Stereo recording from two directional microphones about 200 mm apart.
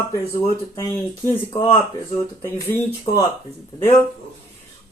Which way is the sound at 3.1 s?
30° left (ahead or behind).